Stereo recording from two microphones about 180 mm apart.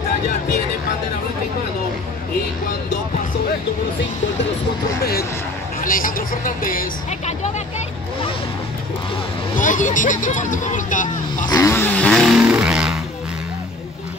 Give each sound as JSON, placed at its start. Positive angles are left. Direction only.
{"t": 5.8, "sound": "speech", "side_deg": 50}
{"t": 9.6, "sound": "speech", "side_deg": 45}
{"t": 11.4, "sound": "vehicle", "side_deg": 20}